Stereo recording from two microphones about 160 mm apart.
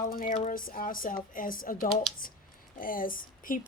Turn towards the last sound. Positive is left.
turn(degrees=60)  # may be behind; listen again after turning